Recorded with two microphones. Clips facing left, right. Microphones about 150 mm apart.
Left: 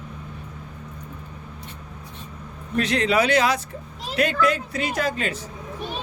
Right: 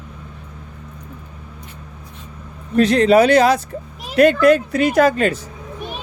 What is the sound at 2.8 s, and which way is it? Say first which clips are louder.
Speech: right 9 dB; 45° right (ahead or behind).